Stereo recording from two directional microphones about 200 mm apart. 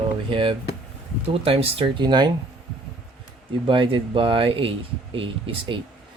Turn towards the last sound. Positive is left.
turn(degrees=-25)  # may be behind; listen again after turning